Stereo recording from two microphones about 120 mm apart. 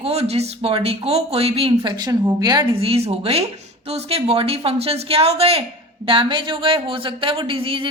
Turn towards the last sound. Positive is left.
turn(degrees=-50)  # may be behind; listen again after turning